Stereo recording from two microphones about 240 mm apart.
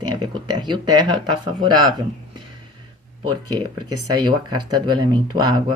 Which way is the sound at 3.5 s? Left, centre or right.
Right.